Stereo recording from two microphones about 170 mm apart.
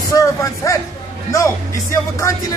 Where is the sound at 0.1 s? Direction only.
20° left (ahead or behind).